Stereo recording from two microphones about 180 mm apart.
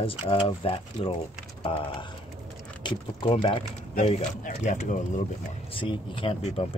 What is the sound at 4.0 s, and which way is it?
Speech, 40° left (ahead or behind).